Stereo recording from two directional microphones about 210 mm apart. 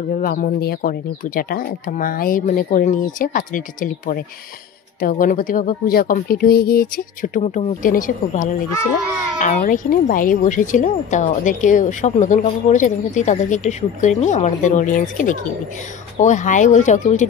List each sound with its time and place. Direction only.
0.1 s a woman's voice: 40° left (ahead or behind)